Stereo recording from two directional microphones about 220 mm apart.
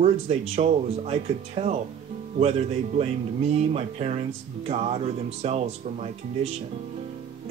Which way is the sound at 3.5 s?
30° right (ahead or behind).